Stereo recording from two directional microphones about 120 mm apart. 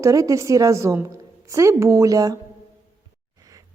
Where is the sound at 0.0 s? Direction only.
25° right (ahead or behind).